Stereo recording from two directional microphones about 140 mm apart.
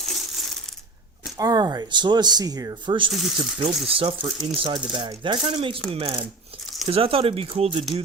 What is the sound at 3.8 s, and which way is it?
Speech, 40° right (ahead or behind).